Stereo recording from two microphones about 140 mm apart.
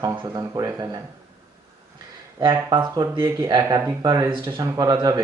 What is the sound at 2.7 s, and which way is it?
Speech, 30° right (ahead or behind).